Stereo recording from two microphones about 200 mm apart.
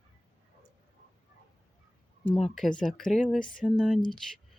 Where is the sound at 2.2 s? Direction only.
5° left (ahead or behind).